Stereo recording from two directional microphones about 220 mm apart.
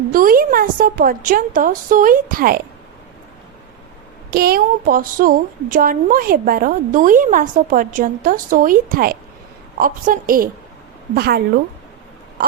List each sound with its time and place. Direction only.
0.1 s a woman's voice: 40° right (ahead or behind)
4.3 s a woman's voice: 45° right (ahead or behind)